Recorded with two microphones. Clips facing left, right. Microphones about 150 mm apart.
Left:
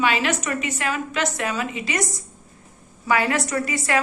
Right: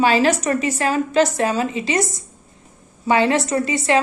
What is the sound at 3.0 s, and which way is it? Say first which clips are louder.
Speech: right 5 dB; 25° right (ahead or behind).